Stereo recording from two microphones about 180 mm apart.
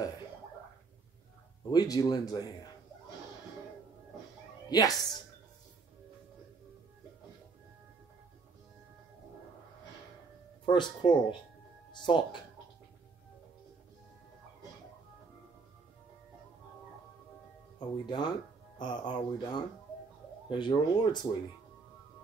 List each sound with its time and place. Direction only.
1.7 s speech: 20° left (ahead or behind)
4.6 s a woman's voice: 20° left (ahead or behind)
10.6 s speech: 25° left (ahead or behind)
17.7 s speech: 25° left (ahead or behind)